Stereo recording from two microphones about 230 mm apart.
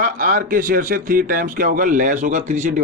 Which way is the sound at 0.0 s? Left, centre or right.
Right.